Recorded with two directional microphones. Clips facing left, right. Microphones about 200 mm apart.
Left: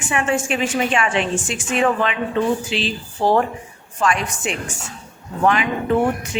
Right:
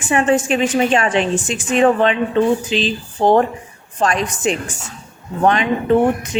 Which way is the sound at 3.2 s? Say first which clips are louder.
Right 4 dB; 30° right (ahead or behind).